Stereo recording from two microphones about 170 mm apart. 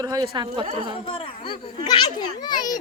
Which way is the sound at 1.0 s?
30° left (ahead or behind).